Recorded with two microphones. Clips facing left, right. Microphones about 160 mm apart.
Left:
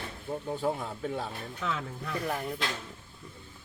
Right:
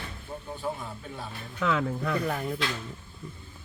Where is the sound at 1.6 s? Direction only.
90° right.